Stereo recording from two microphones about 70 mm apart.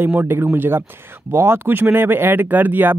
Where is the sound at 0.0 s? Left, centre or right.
Right.